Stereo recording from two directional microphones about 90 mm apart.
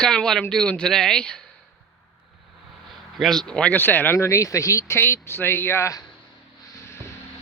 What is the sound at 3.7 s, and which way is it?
Speech, 20° left (ahead or behind).